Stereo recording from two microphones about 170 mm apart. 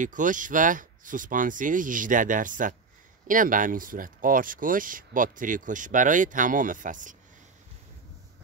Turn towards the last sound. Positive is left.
turn(degrees=-50)  # may be behind; listen again after turning